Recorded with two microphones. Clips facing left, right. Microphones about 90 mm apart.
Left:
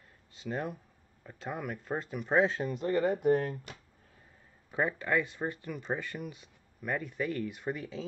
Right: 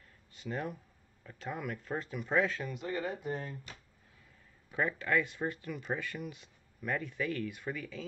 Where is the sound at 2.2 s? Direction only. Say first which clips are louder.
Left 4 dB; 30° left (ahead or behind).